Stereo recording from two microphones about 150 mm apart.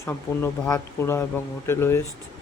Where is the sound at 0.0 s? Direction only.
15° left (ahead or behind).